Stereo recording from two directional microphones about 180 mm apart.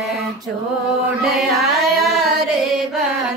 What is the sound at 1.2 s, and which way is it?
Chant, centre (ahead or behind).